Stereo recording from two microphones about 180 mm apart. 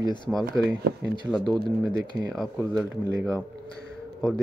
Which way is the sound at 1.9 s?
55° left (ahead or behind).